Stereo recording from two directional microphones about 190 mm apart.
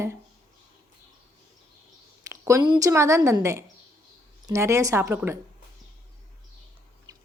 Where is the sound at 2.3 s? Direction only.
15° right (ahead or behind).